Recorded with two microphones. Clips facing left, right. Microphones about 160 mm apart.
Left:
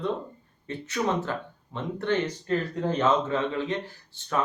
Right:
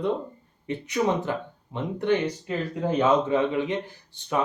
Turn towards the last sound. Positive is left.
turn(degrees=-15)  # may be behind; listen again after turning